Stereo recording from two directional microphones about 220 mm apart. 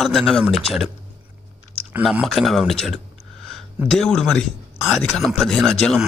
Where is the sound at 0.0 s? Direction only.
Centre (ahead or behind).